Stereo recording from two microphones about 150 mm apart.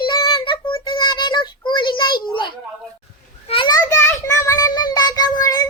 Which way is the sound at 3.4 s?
35° left (ahead or behind).